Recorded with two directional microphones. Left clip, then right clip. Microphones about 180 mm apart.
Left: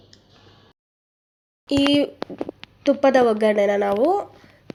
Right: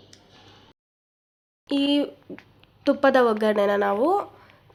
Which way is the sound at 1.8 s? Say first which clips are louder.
Left 5 dB; 10° left (ahead or behind).